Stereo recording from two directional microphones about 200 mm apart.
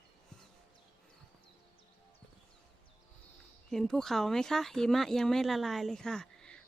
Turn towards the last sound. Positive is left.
turn(degrees=5)  # may be behind; listen again after turning